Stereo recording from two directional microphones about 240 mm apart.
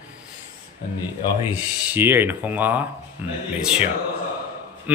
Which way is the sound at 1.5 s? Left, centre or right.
Centre.